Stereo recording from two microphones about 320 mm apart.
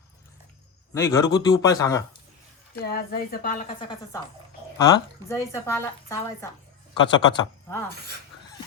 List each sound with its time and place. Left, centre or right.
0.9 s a woman's voice: centre
2.8 s a woman's voice: left; by 7.9 s centre
7.9 s speech: right